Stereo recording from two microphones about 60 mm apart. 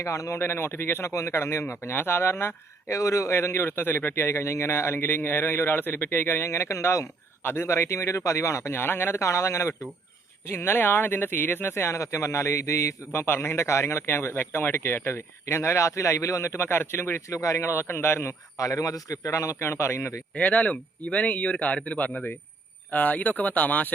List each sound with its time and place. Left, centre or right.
0.0 s a man's voice: left
0.3 s a man's voice: left
2.9 s a man's voice: left
6.5 s speech: left
8.7 s a man's voice: left
9.2 s speech: left
10.4 s a man's voice: left
11.7 s a man's voice: left
13.1 s speech: left
14.1 s speech: left
17.2 s speech: left
18.5 s a man's voice: left
20.3 s speech: left